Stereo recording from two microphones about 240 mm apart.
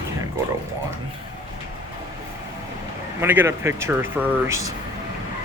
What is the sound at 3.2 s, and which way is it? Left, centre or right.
Speech, centre.